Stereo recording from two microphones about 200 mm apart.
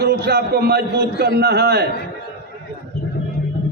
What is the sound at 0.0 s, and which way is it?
A man's voice, 55° right (ahead or behind).